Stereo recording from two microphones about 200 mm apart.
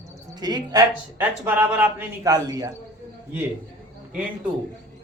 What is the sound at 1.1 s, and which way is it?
A man's voice, 10° right (ahead or behind).